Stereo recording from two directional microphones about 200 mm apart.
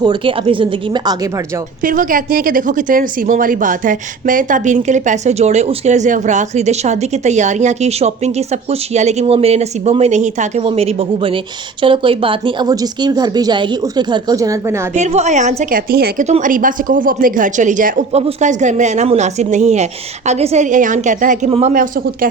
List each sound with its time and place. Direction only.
0.0 s speech: 25° right (ahead or behind)
1.8 s speech: 40° right (ahead or behind); by 14.8 s 15° right (ahead or behind)
14.9 s speech: 35° right (ahead or behind)
16.2 s speech: 35° right (ahead or behind)